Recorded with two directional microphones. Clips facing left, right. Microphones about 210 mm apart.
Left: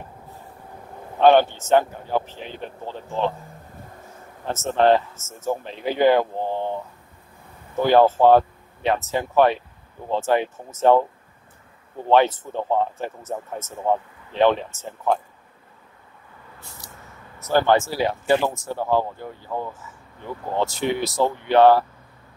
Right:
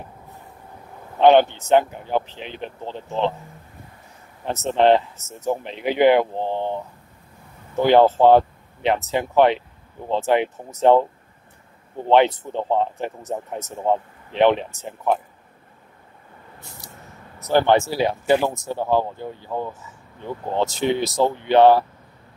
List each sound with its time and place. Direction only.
1.1 s speech: 20° right (ahead or behind)
4.5 s speech: 20° right (ahead or behind)
12.1 s speech: 20° right (ahead or behind)
17.4 s speech: 20° right (ahead or behind)